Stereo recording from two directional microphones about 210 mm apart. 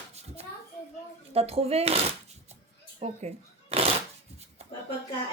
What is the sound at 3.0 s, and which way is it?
Shuffling cards, 30° right (ahead or behind).